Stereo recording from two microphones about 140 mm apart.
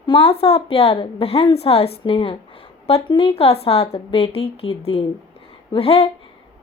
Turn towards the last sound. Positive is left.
turn(degrees=45)  # may be behind; listen again after turning